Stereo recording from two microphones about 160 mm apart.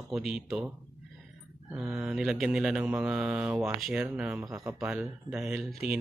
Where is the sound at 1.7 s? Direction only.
5° right (ahead or behind).